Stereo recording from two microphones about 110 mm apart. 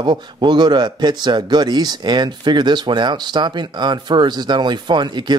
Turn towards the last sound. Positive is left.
turn(degrees=-45)  # may be behind; listen again after turning